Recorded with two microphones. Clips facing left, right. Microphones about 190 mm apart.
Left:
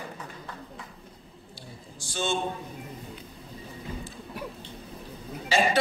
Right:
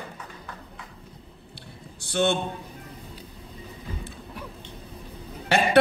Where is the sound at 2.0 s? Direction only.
60° right (ahead or behind).